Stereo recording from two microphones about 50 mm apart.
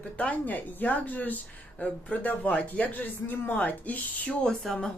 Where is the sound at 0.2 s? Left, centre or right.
Left.